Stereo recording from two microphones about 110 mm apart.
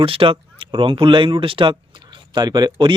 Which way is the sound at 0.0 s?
55° right (ahead or behind).